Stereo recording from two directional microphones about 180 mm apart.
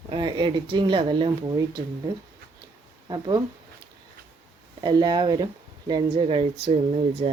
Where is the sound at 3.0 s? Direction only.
25° right (ahead or behind).